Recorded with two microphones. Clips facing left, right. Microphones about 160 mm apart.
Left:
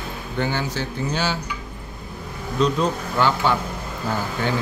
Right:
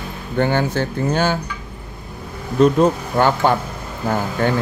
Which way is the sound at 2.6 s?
55° right (ahead or behind).